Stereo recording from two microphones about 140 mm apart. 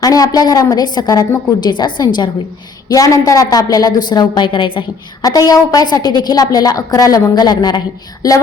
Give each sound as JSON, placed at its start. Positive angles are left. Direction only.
{"t": 0.0, "sound": "a woman's voice", "side_deg": 25}